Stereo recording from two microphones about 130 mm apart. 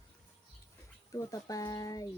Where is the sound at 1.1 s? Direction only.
25° left (ahead or behind).